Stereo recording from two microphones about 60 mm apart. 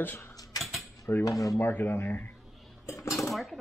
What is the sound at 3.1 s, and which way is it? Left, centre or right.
Dishes, centre.